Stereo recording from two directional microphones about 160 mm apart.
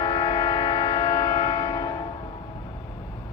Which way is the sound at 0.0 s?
30° left (ahead or behind).